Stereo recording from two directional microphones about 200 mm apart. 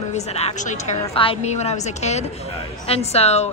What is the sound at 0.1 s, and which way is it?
Speech, 30° left (ahead or behind).